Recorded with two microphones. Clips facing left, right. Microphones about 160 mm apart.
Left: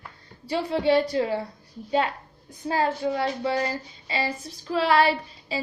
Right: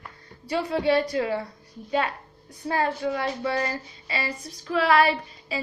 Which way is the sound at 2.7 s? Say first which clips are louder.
Left 1 dB; 30° left (ahead or behind).